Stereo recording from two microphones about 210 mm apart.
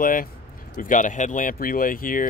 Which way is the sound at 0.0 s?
40° left (ahead or behind).